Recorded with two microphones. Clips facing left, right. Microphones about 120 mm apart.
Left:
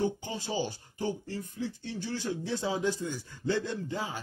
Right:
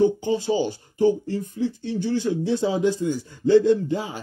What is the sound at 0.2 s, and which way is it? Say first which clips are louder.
Speech: right 11 dB; 20° right (ahead or behind).